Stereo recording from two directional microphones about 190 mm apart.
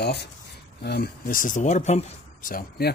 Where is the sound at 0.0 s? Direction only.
60° left (ahead or behind).